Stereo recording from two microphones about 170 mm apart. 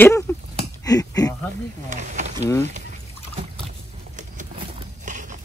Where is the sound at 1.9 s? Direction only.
45° right (ahead or behind).